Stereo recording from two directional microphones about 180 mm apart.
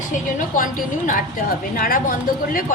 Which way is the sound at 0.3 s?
50° left (ahead or behind).